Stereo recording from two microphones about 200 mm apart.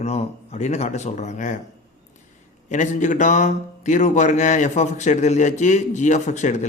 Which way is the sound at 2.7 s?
40° left (ahead or behind).